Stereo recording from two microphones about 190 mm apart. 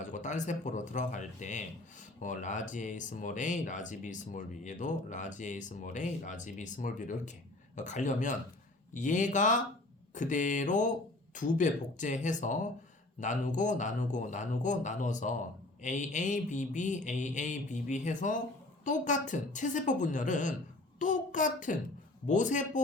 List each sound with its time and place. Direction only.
0.0 s a child's voice: 40° left (ahead or behind)